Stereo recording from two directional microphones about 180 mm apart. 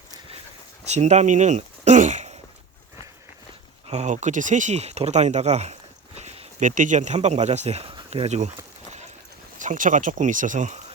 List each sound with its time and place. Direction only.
0.9 s speech: 40° right (ahead or behind)
3.8 s speech: 40° right (ahead or behind)
9.6 s speech: 45° right (ahead or behind)